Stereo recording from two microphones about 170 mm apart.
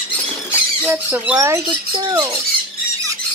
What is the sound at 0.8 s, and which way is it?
Speech, 10° right (ahead or behind).